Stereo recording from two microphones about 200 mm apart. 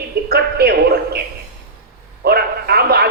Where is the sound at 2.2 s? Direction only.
50° right (ahead or behind).